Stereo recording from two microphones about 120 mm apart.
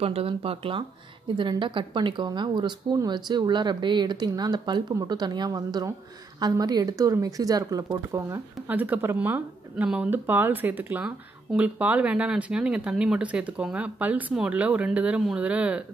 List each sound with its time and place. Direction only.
0.0 s speech: 55° right (ahead or behind); by 8.4 s 25° right (ahead or behind)
8.6 s speech: 15° right (ahead or behind)